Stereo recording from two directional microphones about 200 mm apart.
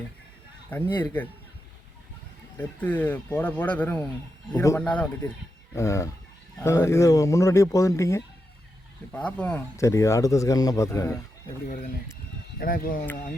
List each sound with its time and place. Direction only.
0.9 s speech: 20° left (ahead or behind)
2.6 s speech: 10° left (ahead or behind)
12.5 s speech: 45° left (ahead or behind)